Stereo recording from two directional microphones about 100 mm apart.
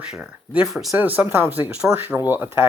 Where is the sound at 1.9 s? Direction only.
20° right (ahead or behind).